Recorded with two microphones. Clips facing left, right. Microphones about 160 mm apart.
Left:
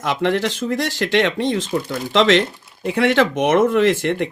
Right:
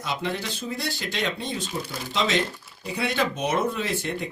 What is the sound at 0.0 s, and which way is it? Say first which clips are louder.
Speech: left 10 dB; 85° left.